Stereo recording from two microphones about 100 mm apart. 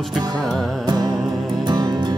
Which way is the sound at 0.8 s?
45° right (ahead or behind).